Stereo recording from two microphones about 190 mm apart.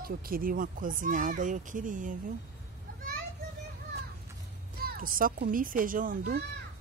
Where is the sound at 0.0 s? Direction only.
50° right (ahead or behind).